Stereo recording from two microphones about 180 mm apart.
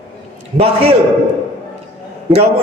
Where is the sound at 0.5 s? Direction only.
35° right (ahead or behind).